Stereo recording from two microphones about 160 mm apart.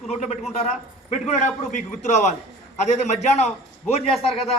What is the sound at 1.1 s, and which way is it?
A man's voice, 45° left (ahead or behind).